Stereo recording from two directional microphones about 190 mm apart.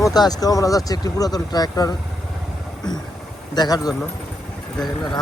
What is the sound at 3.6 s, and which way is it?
Speech, 20° left (ahead or behind).